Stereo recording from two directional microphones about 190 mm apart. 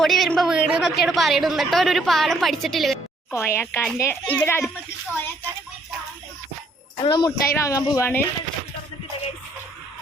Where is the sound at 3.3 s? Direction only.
15° left (ahead or behind).